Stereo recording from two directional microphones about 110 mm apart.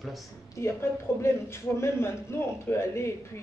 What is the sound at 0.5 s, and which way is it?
A man's voice, 25° left (ahead or behind).